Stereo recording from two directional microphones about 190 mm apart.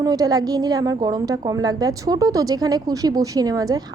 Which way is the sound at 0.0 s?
20° right (ahead or behind).